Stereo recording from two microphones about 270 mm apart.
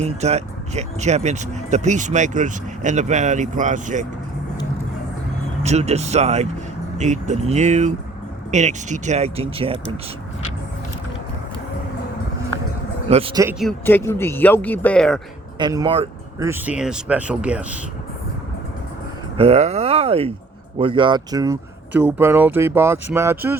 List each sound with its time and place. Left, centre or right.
0.0 s speech: right
5.6 s speech: right
13.1 s speech: right
13.6 s speech: centre
15.5 s speech: centre
19.4 s speech: right